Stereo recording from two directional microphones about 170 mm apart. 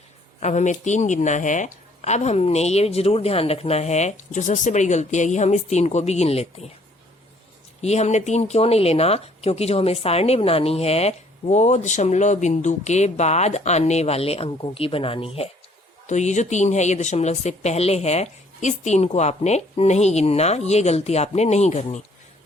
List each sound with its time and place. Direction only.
0.3 s speech: 45° left (ahead or behind)
7.8 s speech: 40° left (ahead or behind)